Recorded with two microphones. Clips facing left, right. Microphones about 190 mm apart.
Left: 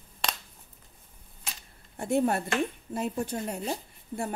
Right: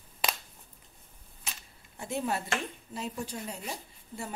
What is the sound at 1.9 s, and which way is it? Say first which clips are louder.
A woman's voice: left 7 dB; 55° left (ahead or behind).